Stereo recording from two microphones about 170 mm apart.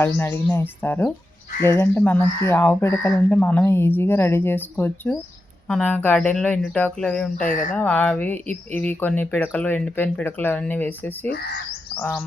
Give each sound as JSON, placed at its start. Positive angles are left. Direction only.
{"t": 0.0, "sound": "speech", "side_deg": 15}
{"t": 7.5, "sound": "speech", "side_deg": 50}
{"t": 7.8, "sound": "speech", "side_deg": 10}